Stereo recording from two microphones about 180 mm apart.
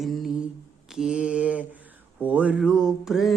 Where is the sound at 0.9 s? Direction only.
5° right (ahead or behind).